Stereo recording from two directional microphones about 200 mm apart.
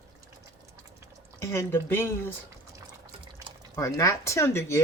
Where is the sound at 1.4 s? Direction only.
15° left (ahead or behind).